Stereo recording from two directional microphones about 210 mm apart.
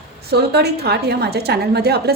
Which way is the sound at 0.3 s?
50° right (ahead or behind).